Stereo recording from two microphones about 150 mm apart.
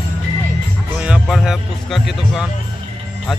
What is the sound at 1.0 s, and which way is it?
Speech, 5° right (ahead or behind).